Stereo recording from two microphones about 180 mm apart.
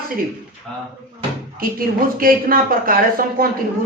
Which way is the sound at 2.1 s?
50° right (ahead or behind).